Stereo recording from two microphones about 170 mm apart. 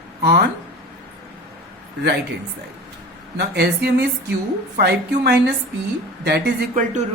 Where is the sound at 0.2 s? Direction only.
70° right (ahead or behind).